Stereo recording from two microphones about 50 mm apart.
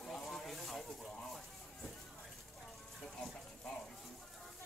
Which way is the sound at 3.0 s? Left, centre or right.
Centre.